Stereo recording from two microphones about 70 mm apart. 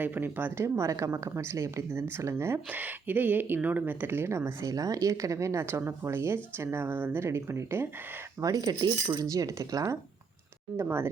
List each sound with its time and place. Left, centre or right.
0.0 s speech: right
0.6 s speech: right
2.6 s speech: right
4.7 s speech: right
8.4 s cutlery: right
9.2 s speech: right
10.8 s speech: right